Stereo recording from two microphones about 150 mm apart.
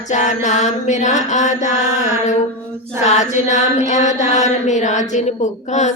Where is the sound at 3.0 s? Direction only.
50° left (ahead or behind).